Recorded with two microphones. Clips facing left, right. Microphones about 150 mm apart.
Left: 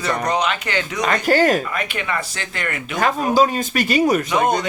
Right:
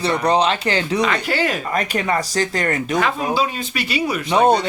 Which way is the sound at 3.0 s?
45° left (ahead or behind).